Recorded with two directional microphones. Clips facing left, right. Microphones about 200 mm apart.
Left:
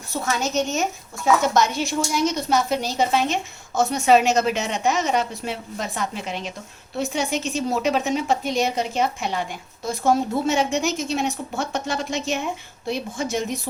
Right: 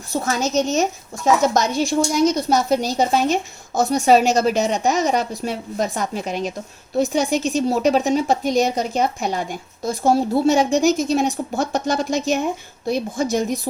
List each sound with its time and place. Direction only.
0.1 s a woman's voice: 40° right (ahead or behind)